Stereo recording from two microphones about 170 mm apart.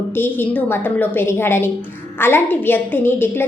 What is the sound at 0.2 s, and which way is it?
A woman's voice, 10° left (ahead or behind).